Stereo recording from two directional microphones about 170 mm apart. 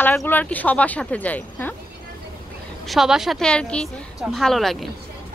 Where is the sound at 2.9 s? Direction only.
5° right (ahead or behind).